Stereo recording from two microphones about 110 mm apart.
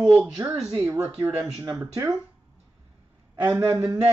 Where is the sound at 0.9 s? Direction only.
30° right (ahead or behind).